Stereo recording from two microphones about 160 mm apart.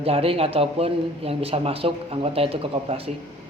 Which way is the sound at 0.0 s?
35° right (ahead or behind).